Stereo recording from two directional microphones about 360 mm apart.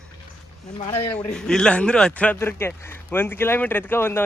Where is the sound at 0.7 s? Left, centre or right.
Centre.